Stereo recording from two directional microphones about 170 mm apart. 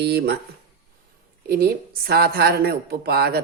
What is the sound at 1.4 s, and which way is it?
A woman's voice, 65° right (ahead or behind).